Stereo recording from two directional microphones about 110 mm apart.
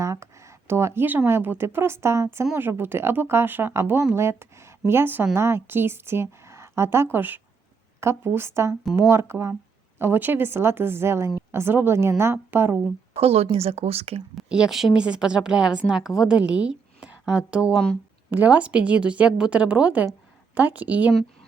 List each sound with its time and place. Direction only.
0.0 s a woman's voice: 25° right (ahead or behind)
13.1 s speech: 65° right (ahead or behind)
14.3 s a woman's voice: 5° right (ahead or behind)